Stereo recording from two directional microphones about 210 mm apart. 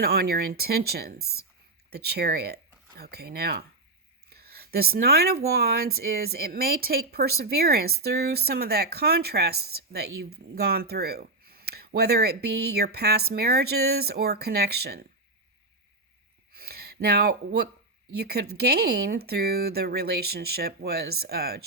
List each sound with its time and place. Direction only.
0.0 s speech: 50° right (ahead or behind)
16.5 s a sound: 45° right (ahead or behind)
18.1 s speech: 50° right (ahead or behind)